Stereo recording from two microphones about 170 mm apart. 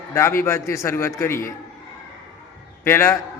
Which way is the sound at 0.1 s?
15° left (ahead or behind).